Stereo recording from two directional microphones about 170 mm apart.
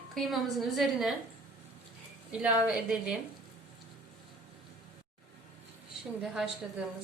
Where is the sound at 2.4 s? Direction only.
5° right (ahead or behind).